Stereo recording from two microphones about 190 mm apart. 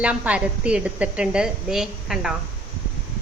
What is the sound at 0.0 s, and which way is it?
A woman's voice, 5° right (ahead or behind).